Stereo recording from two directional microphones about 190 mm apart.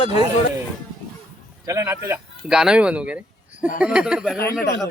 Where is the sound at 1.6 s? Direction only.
15° right (ahead or behind).